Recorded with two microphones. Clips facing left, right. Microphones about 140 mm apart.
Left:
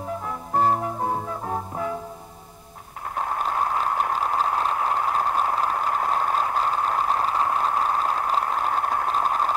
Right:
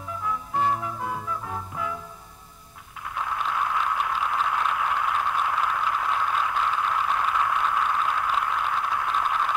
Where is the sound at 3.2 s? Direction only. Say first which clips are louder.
Left 3 dB; 45° left (ahead or behind).